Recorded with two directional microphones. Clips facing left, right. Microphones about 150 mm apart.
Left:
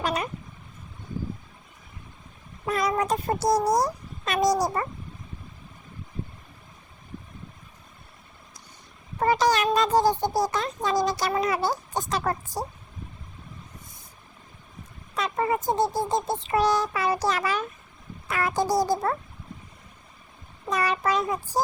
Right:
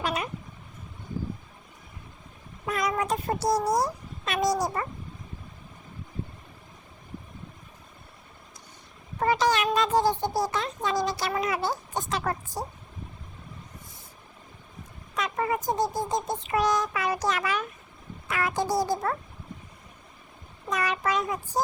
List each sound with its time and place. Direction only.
0.0 s cat: 40° left (ahead or behind)
2.6 s speech: 35° left (ahead or behind)
9.2 s a child's voice: 40° left (ahead or behind)
15.1 s speech: 30° left (ahead or behind)
20.7 s a child's voice: 35° left (ahead or behind)